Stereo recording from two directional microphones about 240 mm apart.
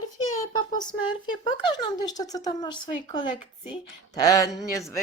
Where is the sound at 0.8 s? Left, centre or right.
Centre.